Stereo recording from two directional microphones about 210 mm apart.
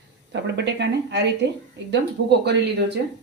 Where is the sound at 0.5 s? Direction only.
55° right (ahead or behind).